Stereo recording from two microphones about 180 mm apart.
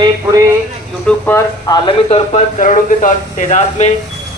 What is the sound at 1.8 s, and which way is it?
Speech, 40° left (ahead or behind).